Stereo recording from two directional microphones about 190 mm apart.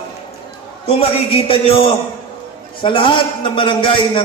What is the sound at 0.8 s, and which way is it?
A man's voice, 30° left (ahead or behind).